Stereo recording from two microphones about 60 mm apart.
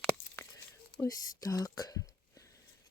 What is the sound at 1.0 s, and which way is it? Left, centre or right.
Speech, left.